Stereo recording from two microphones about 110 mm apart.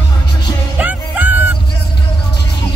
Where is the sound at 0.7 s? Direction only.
15° right (ahead or behind).